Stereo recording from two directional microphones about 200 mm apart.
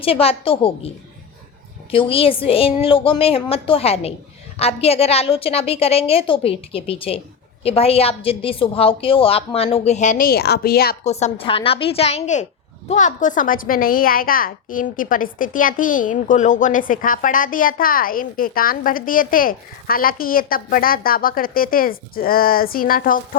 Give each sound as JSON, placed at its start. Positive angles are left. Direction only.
{"t": 0.0, "sound": "a woman's voice", "side_deg": 30}
{"t": 1.9, "sound": "a woman's voice", "side_deg": 25}
{"t": 11.0, "sound": "a woman's voice", "side_deg": 35}